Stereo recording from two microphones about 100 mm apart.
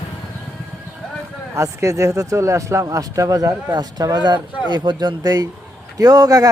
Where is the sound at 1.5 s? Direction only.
30° right (ahead or behind).